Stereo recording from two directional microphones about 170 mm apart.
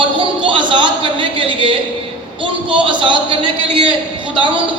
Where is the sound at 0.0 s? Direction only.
30° right (ahead or behind).